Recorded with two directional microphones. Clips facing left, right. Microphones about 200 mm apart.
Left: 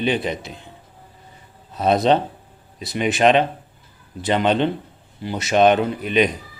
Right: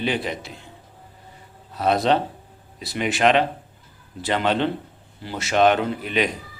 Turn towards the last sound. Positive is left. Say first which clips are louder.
# left 4 dB
turn(degrees=20)  # may be behind; listen again after turning